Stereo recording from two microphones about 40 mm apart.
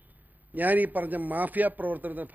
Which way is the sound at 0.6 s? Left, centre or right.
Right.